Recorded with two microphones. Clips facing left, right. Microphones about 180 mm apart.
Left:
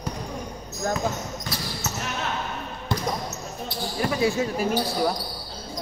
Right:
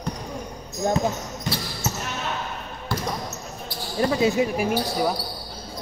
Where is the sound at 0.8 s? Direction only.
20° right (ahead or behind).